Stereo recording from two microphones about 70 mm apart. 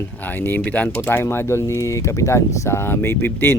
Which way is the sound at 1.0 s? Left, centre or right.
Left.